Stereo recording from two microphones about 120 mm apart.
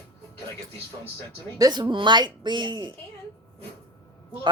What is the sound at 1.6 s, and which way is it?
Speech, 35° right (ahead or behind).